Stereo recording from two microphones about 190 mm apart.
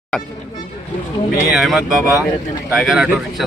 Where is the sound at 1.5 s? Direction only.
Centre (ahead or behind).